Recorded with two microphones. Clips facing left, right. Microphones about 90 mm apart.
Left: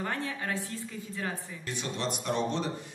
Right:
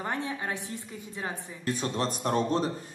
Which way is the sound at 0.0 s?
20° right (ahead or behind).